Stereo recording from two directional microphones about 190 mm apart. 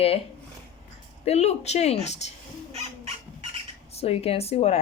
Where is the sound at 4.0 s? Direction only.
30° left (ahead or behind).